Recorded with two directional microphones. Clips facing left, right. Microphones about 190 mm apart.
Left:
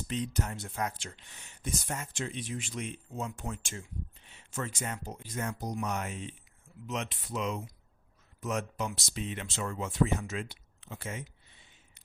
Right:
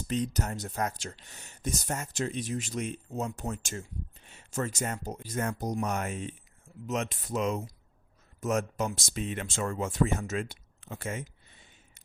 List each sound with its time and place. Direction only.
0.1 s speech: 40° right (ahead or behind)